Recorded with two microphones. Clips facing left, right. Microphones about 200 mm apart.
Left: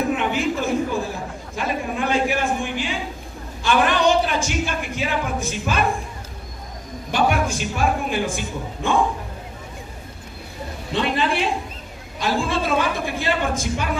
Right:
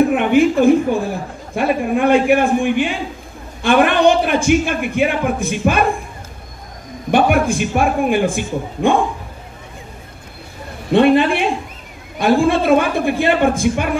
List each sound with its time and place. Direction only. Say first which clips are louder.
0.1 s a man's voice: right 9 dB; 55° right (ahead or behind)
7.1 s a man's voice: right 7 dB; 55° right (ahead or behind)
10.9 s a man's voice: right 11 dB; 55° right (ahead or behind)